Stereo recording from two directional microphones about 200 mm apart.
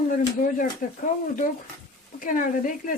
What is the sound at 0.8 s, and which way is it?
Speech, 45° left (ahead or behind).